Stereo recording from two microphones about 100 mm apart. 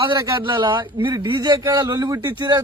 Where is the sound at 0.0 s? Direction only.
55° right (ahead or behind).